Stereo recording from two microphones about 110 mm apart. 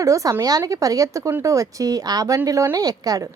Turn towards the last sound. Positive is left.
turn(degrees=-35)  # may be behind; listen again after turning